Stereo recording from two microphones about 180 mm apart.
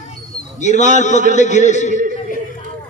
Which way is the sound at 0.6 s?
40° left (ahead or behind).